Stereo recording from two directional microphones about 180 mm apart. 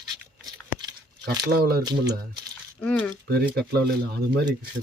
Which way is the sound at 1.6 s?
55° right (ahead or behind).